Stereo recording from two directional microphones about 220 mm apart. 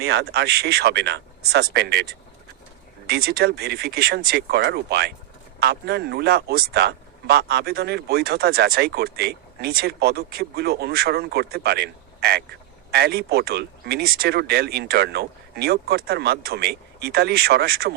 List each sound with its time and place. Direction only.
0.0 s speech: 45° right (ahead or behind)